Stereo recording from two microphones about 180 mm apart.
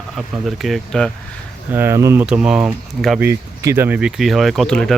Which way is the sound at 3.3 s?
15° right (ahead or behind).